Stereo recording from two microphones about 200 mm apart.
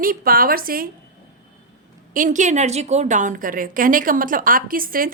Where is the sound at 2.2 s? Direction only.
40° right (ahead or behind).